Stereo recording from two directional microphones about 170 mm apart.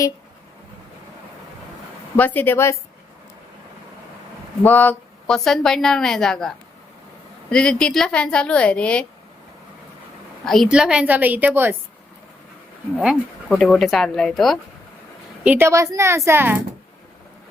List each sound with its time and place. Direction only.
2.1 s a woman's voice: 10° left (ahead or behind)
4.6 s a woman's voice: 10° left (ahead or behind)
7.5 s a woman's voice: 5° left (ahead or behind)
10.4 s a woman's voice: centre (ahead or behind)
13.5 s a woman's voice: 5° left (ahead or behind)
15.4 s a woman's voice: 15° right (ahead or behind)